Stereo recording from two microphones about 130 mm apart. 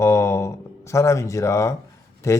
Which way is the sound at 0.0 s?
20° left (ahead or behind).